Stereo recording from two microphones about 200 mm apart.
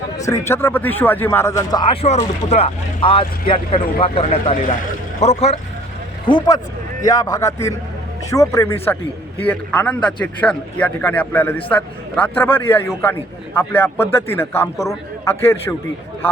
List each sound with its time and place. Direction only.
0.2 s speech: 15° left (ahead or behind)